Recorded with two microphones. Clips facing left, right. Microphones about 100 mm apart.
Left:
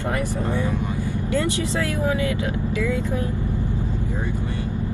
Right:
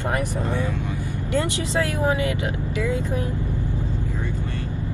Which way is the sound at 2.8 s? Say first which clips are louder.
Right 1 dB; 20° right (ahead or behind).